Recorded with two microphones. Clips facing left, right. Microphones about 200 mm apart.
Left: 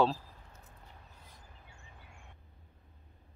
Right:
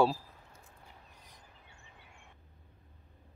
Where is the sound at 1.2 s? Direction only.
15° right (ahead or behind).